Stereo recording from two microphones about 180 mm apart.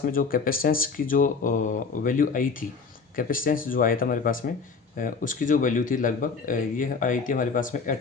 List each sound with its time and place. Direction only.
0.0 s speech: 50° left (ahead or behind)